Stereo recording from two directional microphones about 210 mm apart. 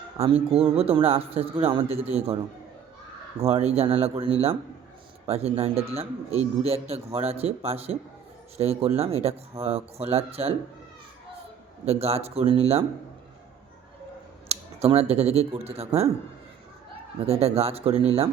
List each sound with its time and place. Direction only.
0.4 s a man's voice: 25° right (ahead or behind)
3.4 s a man's voice: 30° right (ahead or behind)
11.9 s a man's voice: 30° right (ahead or behind)
14.4 s speech: 30° right (ahead or behind)
17.2 s a man's voice: 30° right (ahead or behind)